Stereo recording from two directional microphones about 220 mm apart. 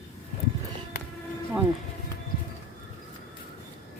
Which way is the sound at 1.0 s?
45° left (ahead or behind).